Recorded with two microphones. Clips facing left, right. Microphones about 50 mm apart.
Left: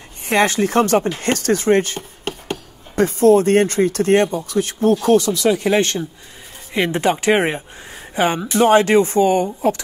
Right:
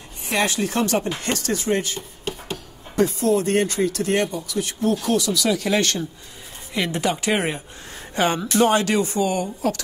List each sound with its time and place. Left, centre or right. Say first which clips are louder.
0.3 s speech: left 6 dB; left
7.9 s speech: left 3 dB; centre
8.6 s speech: left 9 dB; left